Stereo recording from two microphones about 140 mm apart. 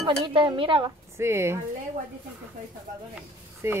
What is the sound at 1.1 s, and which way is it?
Speech, 20° right (ahead or behind).